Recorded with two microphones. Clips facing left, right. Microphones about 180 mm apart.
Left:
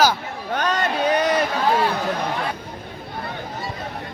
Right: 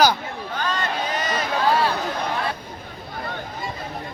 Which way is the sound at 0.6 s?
70° left (ahead or behind).